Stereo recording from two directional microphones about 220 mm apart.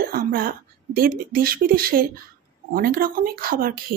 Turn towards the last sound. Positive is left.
turn(degrees=-40)  # may be behind; listen again after turning